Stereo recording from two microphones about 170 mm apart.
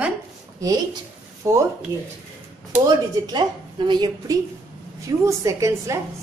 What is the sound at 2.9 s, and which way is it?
A woman's voice, 25° right (ahead or behind).